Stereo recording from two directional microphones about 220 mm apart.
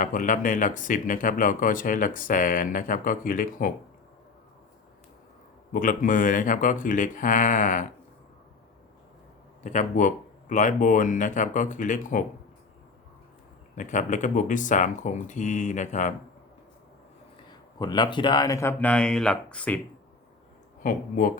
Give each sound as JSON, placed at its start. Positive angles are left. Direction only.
{"t": 0.0, "sound": "speech", "side_deg": 35}
{"t": 5.7, "sound": "speech", "side_deg": 35}
{"t": 9.6, "sound": "speech", "side_deg": 35}
{"t": 13.7, "sound": "speech", "side_deg": 35}
{"t": 17.7, "sound": "speech", "side_deg": 20}
{"t": 20.8, "sound": "speech", "side_deg": 40}